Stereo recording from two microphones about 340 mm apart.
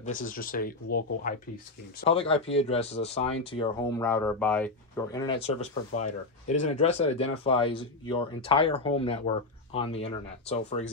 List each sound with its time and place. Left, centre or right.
0.0 s speech: left